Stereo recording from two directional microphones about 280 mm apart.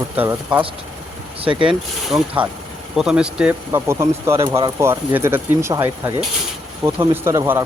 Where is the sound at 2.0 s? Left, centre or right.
Centre.